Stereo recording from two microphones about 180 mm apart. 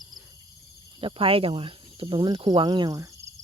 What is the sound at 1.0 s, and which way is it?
Speech, 30° right (ahead or behind).